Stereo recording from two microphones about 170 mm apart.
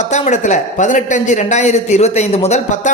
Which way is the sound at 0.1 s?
45° left (ahead or behind).